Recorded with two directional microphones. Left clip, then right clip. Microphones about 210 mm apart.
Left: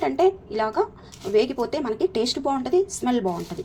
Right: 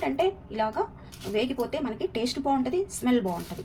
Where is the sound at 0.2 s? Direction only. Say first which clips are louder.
Left 7 dB; 25° left (ahead or behind).